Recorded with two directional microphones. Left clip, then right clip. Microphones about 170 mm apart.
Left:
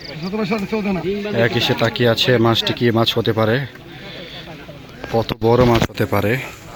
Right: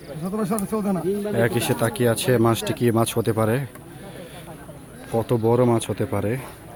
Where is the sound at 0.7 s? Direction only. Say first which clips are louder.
Left 2 dB; 20° right (ahead or behind).